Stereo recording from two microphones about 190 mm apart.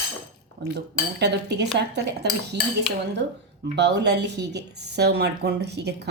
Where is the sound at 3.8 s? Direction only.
65° right (ahead or behind).